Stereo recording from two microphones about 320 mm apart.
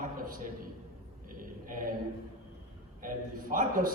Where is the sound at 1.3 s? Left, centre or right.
Right.